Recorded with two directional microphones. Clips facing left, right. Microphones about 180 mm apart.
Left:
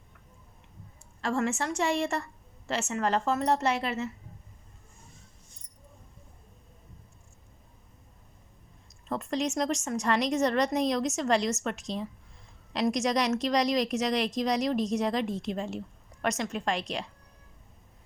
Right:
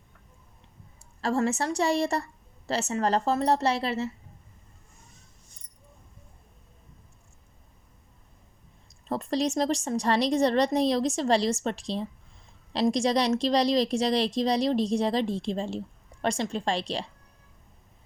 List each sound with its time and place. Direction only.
1.2 s a woman's voice: 35° right (ahead or behind)
9.0 s a woman's voice: 35° right (ahead or behind)